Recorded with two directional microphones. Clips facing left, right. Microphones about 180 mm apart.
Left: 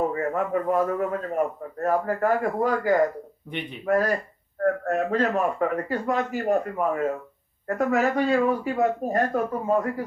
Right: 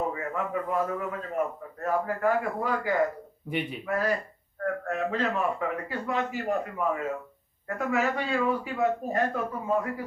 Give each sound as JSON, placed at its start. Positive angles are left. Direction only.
{"t": 0.1, "sound": "a man's voice", "side_deg": 45}
{"t": 3.5, "sound": "a man's voice", "side_deg": -5}
{"t": 3.8, "sound": "a man's voice", "side_deg": 45}